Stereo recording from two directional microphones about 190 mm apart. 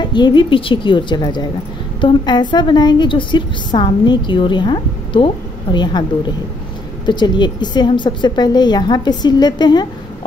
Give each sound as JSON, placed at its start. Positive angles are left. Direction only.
{"t": 0.0, "sound": "a woman's voice", "side_deg": 25}
{"t": 7.1, "sound": "a woman's voice", "side_deg": 25}